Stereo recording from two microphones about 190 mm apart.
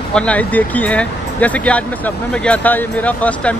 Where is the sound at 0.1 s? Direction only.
5° left (ahead or behind).